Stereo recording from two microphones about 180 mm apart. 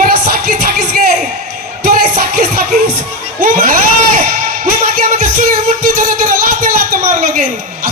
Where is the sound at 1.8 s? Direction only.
55° right (ahead or behind).